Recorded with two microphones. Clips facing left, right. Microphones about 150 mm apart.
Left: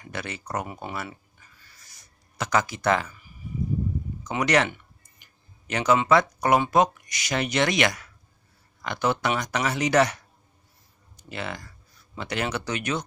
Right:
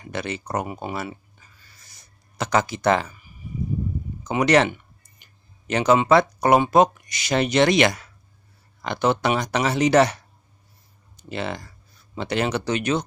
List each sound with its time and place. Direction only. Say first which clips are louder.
0.0 s speech: right 6 dB; 25° right (ahead or behind)
2.0 s speech: right 3 dB; 25° right (ahead or behind)
4.2 s speech: right 5 dB; 25° right (ahead or behind)
5.7 s speech: right 4 dB; 30° right (ahead or behind)